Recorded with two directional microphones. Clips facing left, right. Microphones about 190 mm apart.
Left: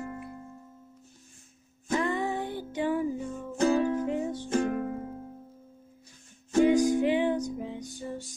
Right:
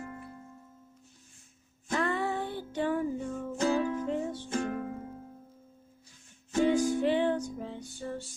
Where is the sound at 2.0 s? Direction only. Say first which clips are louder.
Even; 15° left (ahead or behind).